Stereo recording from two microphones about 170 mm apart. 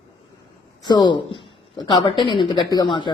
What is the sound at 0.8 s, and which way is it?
Speech, 25° left (ahead or behind).